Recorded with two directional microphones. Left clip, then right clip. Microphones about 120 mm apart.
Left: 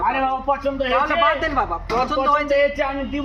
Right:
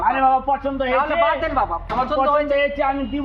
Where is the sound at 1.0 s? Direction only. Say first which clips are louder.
Even; 20° right (ahead or behind).